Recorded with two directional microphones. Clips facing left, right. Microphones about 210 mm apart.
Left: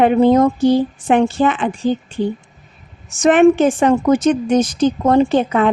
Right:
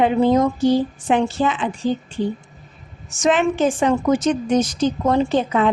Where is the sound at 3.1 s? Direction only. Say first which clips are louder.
Left 8 dB; 55° left (ahead or behind).